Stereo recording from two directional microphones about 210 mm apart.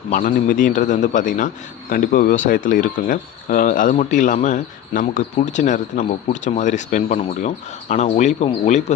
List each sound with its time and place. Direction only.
0.1 s speech: 40° left (ahead or behind)